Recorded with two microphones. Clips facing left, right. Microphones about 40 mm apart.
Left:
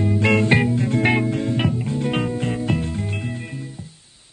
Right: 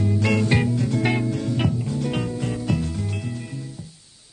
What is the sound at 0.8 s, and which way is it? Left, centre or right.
Music, left.